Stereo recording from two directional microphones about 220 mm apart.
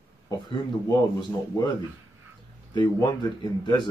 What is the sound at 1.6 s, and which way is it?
Speech, 20° left (ahead or behind).